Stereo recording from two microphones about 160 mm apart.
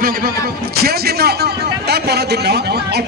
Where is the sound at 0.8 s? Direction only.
80° right.